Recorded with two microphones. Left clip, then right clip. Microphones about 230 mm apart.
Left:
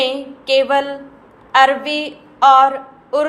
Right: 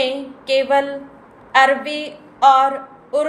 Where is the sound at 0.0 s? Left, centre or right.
Centre.